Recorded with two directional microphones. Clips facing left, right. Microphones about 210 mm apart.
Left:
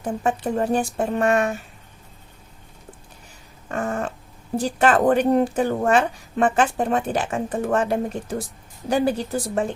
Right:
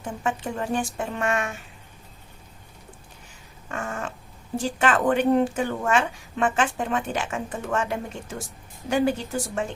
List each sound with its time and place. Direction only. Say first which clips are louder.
0.0 s speech: left 5 dB; 35° left (ahead or behind)
3.7 s speech: left 6 dB; 35° left (ahead or behind)